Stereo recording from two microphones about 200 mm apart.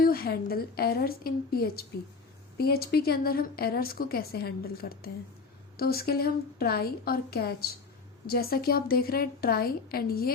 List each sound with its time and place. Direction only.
0.0 s speech: 50° left (ahead or behind)